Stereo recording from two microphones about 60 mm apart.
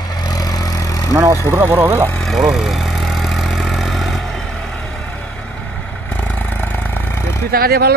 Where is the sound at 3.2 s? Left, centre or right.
Centre.